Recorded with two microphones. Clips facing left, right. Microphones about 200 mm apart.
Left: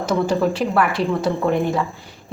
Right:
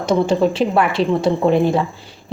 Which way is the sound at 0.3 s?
25° right (ahead or behind).